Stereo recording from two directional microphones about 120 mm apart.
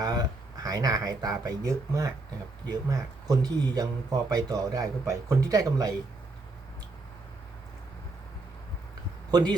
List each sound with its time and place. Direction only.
0.0 s speech: 30° right (ahead or behind)
9.3 s speech: 35° right (ahead or behind)